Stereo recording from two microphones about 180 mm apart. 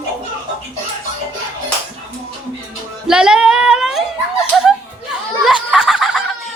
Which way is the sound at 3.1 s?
5° right (ahead or behind).